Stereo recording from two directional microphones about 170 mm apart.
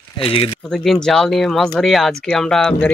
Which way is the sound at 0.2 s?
35° left (ahead or behind).